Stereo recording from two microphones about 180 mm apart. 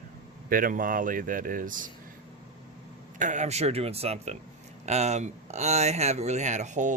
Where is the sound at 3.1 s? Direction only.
45° right (ahead or behind).